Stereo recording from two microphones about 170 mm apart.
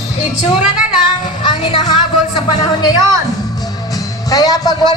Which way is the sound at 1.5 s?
25° left (ahead or behind).